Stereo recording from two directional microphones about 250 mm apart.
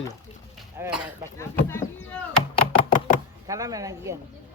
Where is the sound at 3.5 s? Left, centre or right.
Centre.